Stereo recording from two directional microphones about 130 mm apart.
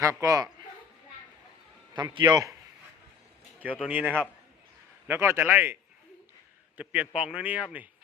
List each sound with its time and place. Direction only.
0.0 s a man's voice: 25° right (ahead or behind)
1.9 s a man's voice: 35° right (ahead or behind)
3.8 s a man's voice: 10° right (ahead or behind)
6.7 s a man's voice: 10° right (ahead or behind)